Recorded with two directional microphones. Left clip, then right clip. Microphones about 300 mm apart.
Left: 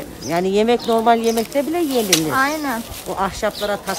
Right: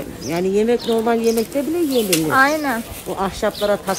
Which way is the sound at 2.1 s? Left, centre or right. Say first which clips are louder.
Right 4 dB; centre.